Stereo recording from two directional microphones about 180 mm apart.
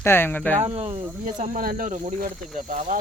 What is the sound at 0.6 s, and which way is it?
Speech, 35° right (ahead or behind).